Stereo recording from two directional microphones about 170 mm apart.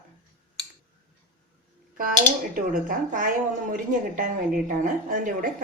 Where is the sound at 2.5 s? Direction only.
55° right (ahead or behind).